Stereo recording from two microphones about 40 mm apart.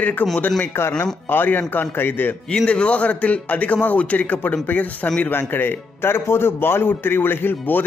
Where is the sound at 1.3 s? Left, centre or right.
Left.